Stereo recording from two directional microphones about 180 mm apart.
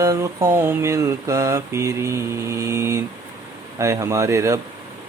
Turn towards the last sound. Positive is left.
turn(degrees=-15)  # may be behind; listen again after turning